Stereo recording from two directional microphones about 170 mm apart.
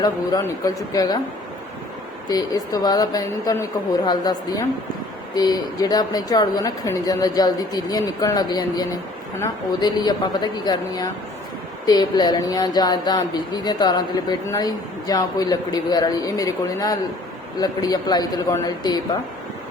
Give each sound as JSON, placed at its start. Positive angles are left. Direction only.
{"t": 0.0, "sound": "speech", "side_deg": 20}
{"t": 2.3, "sound": "speech", "side_deg": 20}